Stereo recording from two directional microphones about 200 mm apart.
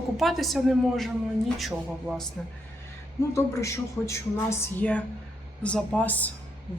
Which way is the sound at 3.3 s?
15° left (ahead or behind).